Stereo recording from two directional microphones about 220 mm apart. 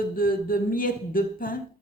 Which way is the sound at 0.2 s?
40° left (ahead or behind).